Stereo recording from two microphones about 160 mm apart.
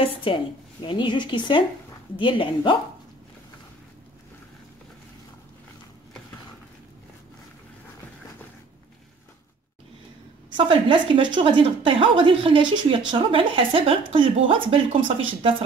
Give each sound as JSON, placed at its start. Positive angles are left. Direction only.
{"t": 0.0, "sound": "a woman's voice", "side_deg": 35}
{"t": 10.5, "sound": "a woman's voice", "side_deg": -30}